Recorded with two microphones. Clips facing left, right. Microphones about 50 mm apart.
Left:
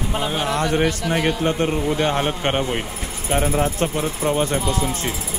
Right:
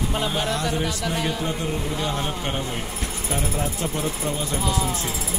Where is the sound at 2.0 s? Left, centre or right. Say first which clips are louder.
Left 6 dB; left.